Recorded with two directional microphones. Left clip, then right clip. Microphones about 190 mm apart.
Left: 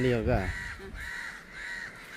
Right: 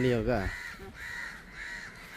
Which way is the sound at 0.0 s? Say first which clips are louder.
Left 1 dB; centre (ahead or behind).